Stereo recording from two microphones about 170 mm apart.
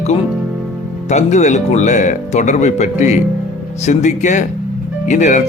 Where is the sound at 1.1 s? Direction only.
45° left (ahead or behind).